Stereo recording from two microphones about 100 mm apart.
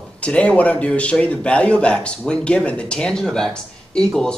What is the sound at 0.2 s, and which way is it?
A man's voice, 10° left (ahead or behind).